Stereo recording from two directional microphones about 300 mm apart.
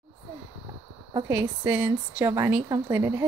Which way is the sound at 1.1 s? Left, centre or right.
Centre.